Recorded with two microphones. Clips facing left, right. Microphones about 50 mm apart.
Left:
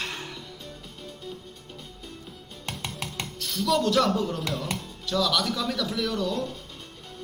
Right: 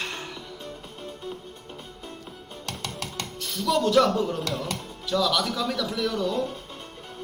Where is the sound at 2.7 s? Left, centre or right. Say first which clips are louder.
Even; centre.